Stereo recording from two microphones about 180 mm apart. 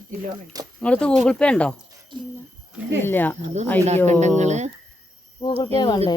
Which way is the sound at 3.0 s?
10° left (ahead or behind).